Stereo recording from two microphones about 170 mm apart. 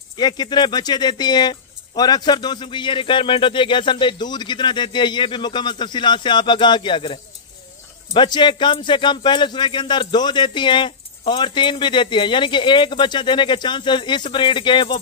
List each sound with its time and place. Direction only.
0.2 s speech: 25° left (ahead or behind)